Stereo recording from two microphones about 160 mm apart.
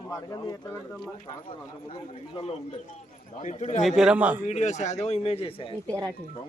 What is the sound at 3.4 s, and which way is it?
Speech, 45° left (ahead or behind).